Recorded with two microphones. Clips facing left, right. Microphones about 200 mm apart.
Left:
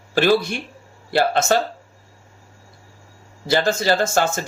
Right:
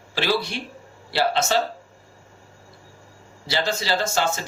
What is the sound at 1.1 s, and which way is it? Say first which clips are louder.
Speech: left 4 dB; 50° left (ahead or behind).